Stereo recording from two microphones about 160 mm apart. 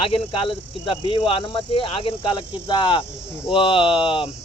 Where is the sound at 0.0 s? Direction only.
35° left (ahead or behind).